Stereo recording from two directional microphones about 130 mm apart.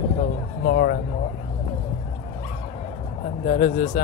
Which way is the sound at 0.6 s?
90° left.